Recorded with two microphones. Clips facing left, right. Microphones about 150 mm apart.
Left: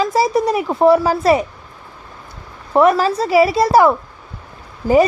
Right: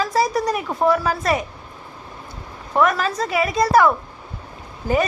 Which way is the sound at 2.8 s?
30° left (ahead or behind).